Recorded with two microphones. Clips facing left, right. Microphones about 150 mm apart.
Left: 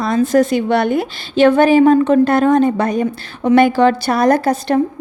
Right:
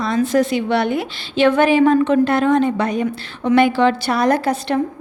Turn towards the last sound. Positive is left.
turn(degrees=40)  # may be behind; listen again after turning